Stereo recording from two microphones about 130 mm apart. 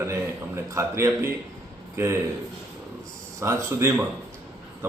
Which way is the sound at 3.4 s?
20° right (ahead or behind).